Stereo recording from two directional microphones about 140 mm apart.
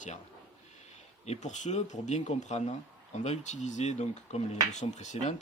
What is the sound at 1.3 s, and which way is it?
Speech, 55° left (ahead or behind).